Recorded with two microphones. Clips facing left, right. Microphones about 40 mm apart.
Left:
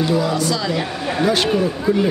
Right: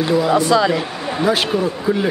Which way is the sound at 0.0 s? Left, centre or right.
Centre.